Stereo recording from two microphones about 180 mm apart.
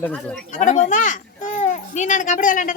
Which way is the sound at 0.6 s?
45° left (ahead or behind).